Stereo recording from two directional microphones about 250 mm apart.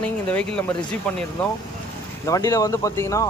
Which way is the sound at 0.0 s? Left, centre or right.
Centre.